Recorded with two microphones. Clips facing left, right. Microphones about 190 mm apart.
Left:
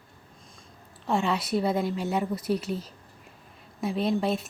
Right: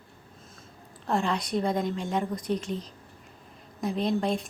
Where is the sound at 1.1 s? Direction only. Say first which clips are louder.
Left 1 dB; centre (ahead or behind).